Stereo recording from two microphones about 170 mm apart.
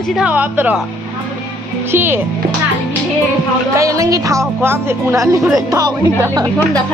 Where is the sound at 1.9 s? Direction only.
15° right (ahead or behind).